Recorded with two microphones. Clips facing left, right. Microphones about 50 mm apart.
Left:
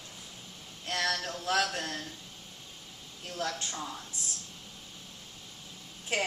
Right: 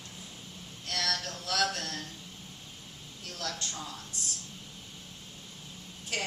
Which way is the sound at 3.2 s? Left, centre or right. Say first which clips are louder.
Left 3 dB; left.